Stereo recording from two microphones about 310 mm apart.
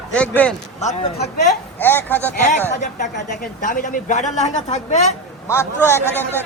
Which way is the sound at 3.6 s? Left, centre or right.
Left.